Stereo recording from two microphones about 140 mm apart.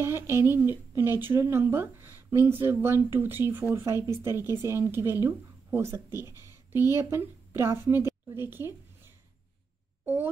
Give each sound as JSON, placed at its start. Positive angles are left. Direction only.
{"t": 0.0, "sound": "a woman's voice", "side_deg": -15}